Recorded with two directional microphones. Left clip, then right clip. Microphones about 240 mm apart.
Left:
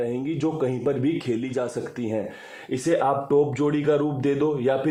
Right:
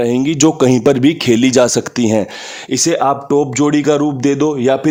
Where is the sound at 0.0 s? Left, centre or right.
Right.